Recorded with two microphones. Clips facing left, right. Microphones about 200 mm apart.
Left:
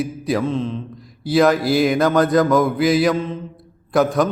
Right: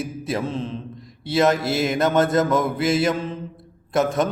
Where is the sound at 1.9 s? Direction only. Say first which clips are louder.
Left 3 dB; 25° right (ahead or behind).